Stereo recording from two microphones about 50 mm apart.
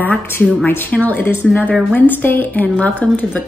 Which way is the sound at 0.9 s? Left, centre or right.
Left.